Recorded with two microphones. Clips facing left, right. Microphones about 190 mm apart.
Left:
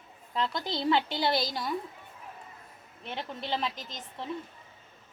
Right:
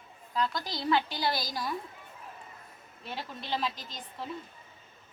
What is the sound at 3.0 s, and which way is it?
Speech, 20° left (ahead or behind).